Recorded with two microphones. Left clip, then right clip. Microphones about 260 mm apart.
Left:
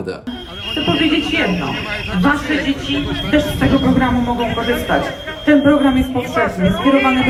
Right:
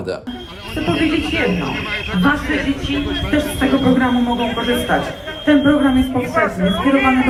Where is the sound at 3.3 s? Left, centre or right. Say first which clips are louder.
Left 2 dB; right.